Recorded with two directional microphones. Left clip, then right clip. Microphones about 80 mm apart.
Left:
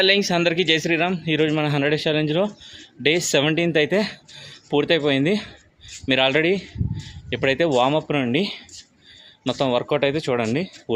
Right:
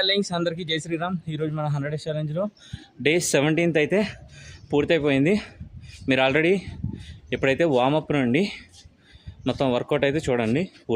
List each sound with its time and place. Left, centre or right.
0.0 s speech: centre